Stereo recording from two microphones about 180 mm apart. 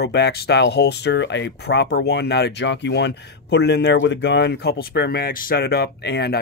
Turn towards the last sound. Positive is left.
turn(degrees=65)  # may be behind; listen again after turning